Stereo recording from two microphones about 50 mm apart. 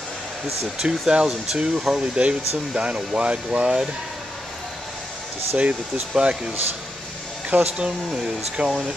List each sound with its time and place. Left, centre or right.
0.7 s speech: centre
5.6 s speech: right
7.4 s speech: right